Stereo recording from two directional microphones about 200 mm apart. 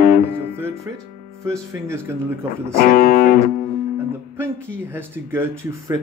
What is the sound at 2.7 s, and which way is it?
Speech, 45° left (ahead or behind).